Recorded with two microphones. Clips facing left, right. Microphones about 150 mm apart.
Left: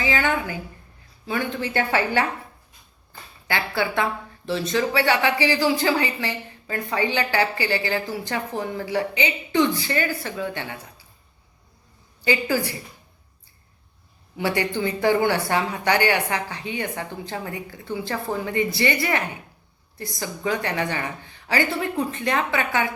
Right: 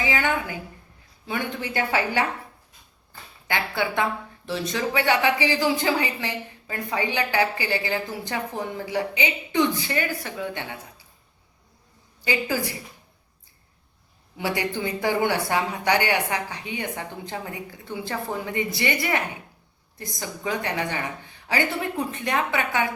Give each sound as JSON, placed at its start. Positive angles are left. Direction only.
{"t": 0.0, "sound": "a sound", "side_deg": -20}
{"t": 1.3, "sound": "a woman's voice", "side_deg": -15}
{"t": 3.4, "sound": "speech", "side_deg": -20}
{"t": 12.2, "sound": "a woman's voice", "side_deg": -20}
{"t": 14.8, "sound": "a woman's voice", "side_deg": -15}